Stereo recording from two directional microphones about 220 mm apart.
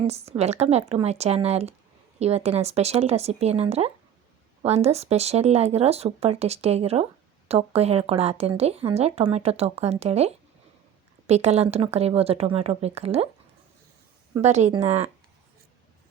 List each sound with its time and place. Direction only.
0.0 s speech: 30° right (ahead or behind)
14.4 s speech: 30° right (ahead or behind)